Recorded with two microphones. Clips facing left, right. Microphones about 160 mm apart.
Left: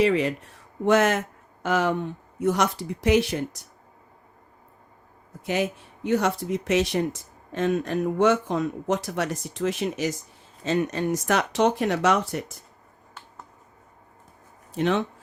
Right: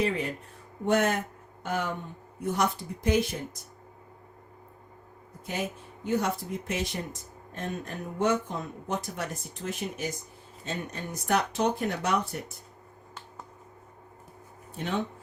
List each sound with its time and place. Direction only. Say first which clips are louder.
0.0 s speech: left 7 dB; 90° left; by 3.7 s 75° left (ahead or behind)
5.5 s speech: left 8 dB; 80° left
14.7 s speech: left 8 dB; 90° left